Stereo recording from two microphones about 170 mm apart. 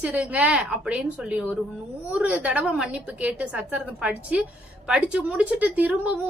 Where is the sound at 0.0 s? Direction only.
10° right (ahead or behind).